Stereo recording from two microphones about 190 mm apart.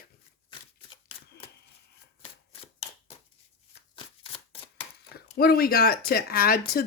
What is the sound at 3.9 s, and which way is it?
Shuffling cards, 25° left (ahead or behind).